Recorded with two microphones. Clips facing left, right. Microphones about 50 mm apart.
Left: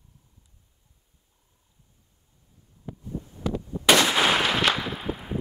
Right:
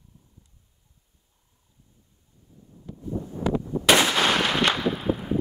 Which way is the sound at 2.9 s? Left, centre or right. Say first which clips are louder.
Right 7 dB; right.